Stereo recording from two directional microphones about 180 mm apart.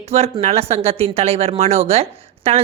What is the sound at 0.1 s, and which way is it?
Speech, 35° right (ahead or behind).